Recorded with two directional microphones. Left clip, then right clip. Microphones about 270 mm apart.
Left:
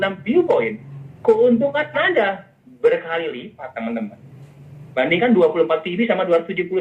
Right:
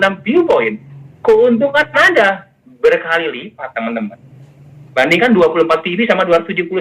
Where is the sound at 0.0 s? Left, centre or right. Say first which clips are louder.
Right 6 dB; right.